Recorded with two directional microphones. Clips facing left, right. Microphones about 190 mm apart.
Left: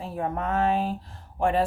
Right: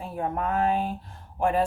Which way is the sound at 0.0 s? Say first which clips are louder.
Even; 35° left (ahead or behind).